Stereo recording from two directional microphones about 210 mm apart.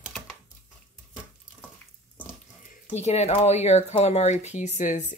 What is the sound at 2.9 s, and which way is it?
Speech, 30° left (ahead or behind).